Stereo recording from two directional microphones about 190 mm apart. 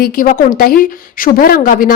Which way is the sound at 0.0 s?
45° left (ahead or behind).